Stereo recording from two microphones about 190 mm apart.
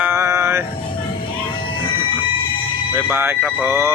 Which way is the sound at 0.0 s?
15° right (ahead or behind).